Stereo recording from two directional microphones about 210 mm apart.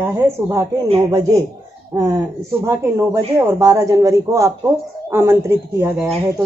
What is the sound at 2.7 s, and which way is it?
A woman's voice, 15° right (ahead or behind).